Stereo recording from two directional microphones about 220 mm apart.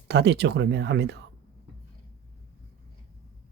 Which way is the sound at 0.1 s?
50° right (ahead or behind).